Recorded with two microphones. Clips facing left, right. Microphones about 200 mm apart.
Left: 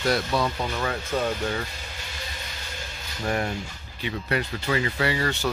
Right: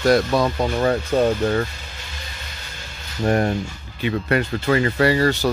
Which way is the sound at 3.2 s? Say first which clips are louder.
Right 8 dB; 45° right (ahead or behind).